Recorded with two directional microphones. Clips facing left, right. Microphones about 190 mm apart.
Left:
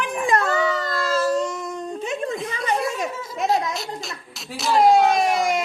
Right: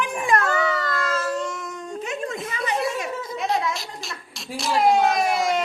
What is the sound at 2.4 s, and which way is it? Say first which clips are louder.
Chuckle: left 1 dB; centre (ahead or behind).